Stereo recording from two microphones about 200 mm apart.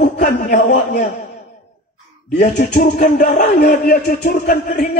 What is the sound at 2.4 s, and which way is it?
Speech, 35° left (ahead or behind).